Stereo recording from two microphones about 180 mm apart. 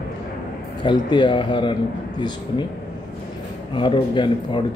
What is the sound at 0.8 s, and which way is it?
Speech, 25° left (ahead or behind).